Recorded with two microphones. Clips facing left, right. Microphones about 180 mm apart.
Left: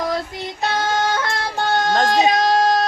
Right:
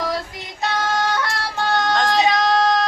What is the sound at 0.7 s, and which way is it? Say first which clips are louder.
Yodeling: left 1 dB; 25° left (ahead or behind).